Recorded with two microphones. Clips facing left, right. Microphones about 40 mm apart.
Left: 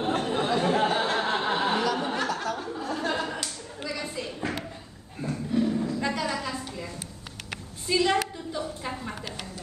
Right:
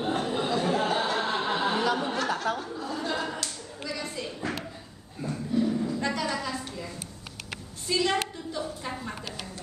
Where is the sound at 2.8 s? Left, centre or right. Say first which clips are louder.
Left 2 dB; left.